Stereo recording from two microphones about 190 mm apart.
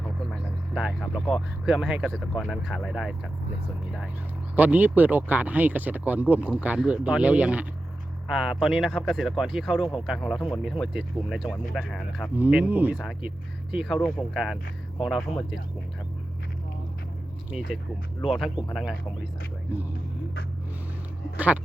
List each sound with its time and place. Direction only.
0.0 s vehicle: centre (ahead or behind)
1.6 s speech: 5° right (ahead or behind)
4.5 s speech: 10° right (ahead or behind)
18.3 s speech: centre (ahead or behind)
21.3 s speech: 10° right (ahead or behind)